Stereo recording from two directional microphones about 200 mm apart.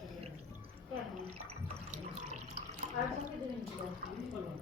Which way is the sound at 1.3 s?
35° right (ahead or behind).